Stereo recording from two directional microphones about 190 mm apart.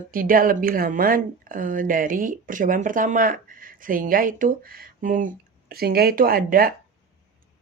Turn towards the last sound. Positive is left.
turn(degrees=-50)  # may be behind; listen again after turning